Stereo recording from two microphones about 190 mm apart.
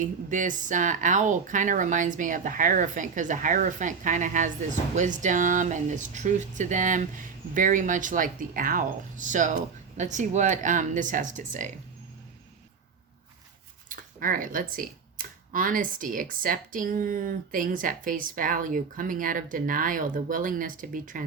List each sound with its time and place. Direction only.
0.0 s speech: 45° right (ahead or behind)
13.9 s speech: 45° right (ahead or behind)